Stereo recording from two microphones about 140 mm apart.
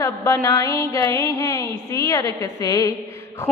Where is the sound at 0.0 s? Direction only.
20° left (ahead or behind).